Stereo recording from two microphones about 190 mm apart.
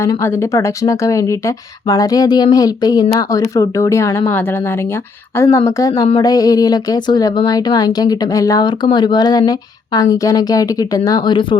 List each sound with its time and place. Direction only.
0.0 s speech: 15° left (ahead or behind)
5.4 s speech: 15° left (ahead or behind)